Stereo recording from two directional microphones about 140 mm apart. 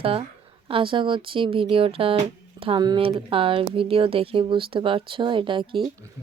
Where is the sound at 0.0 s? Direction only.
45° right (ahead or behind).